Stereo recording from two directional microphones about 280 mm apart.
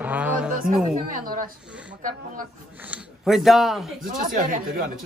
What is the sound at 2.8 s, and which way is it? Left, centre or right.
Speech, centre.